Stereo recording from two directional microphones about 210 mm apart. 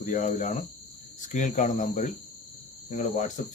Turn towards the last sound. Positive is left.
turn(degrees=35)  # may be behind; listen again after turning